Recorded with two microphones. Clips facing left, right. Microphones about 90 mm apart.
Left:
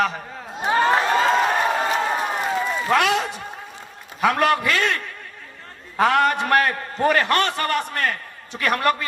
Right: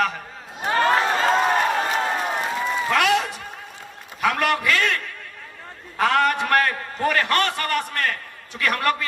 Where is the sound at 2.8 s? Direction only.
30° left (ahead or behind).